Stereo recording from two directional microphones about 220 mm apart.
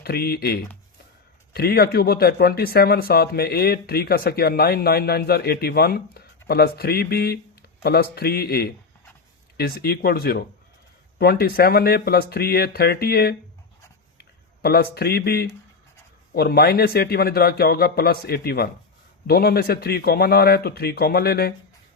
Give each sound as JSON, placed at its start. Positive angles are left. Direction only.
{"t": 0.0, "sound": "speech", "side_deg": 45}